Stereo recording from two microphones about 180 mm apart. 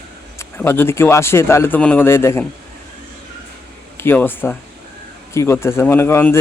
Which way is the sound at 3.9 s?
10° left (ahead or behind).